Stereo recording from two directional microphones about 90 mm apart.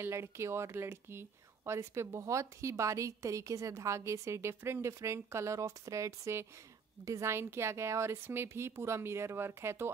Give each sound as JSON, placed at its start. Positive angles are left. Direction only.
{"t": 0.0, "sound": "a woman's voice", "side_deg": -30}